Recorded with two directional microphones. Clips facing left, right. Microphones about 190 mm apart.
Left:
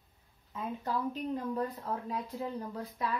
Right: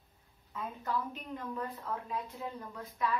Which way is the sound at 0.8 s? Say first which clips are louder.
Left 4 dB; 35° left (ahead or behind).